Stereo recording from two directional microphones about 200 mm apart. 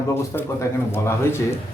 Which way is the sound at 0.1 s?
10° left (ahead or behind).